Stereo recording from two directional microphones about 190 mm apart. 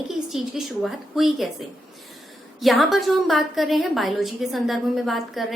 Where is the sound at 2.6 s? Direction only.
Centre (ahead or behind).